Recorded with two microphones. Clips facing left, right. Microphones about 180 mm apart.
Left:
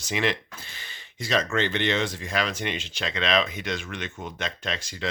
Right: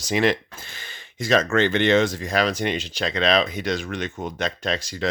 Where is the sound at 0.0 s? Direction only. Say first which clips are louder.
Right 6 dB; 40° right (ahead or behind).